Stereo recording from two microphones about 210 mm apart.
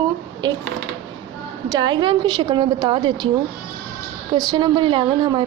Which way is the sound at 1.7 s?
20° right (ahead or behind).